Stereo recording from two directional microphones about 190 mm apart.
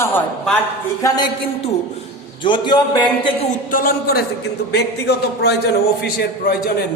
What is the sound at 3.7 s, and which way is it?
Speech, 50° left (ahead or behind).